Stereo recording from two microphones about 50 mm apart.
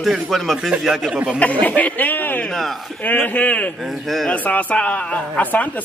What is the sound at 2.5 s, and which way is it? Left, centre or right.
Speech, centre.